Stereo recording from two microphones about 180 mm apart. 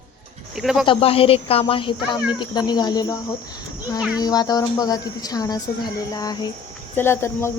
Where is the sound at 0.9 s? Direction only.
30° left (ahead or behind).